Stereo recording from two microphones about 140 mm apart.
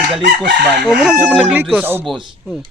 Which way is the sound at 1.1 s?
15° right (ahead or behind).